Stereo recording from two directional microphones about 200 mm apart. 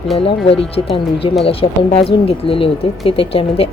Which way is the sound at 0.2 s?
30° left (ahead or behind).